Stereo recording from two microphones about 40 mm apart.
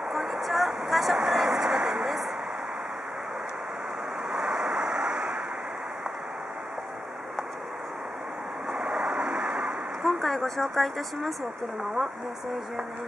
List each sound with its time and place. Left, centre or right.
0.1 s a sound: centre
1.1 s vehicle: centre
4.3 s waves: centre
8.9 s vehicle: right
10.0 s speech: centre